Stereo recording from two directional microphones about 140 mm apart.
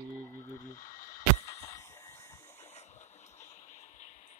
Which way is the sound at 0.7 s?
70° left (ahead or behind).